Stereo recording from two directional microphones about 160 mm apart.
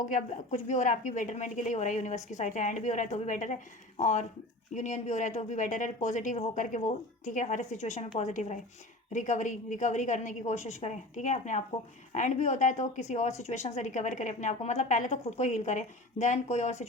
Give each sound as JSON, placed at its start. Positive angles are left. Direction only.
{"t": 0.1, "sound": "a woman's voice", "side_deg": 50}